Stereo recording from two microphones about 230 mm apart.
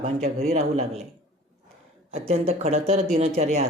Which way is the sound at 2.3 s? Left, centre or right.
Right.